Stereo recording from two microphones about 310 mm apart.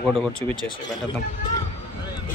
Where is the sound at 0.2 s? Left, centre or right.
Centre.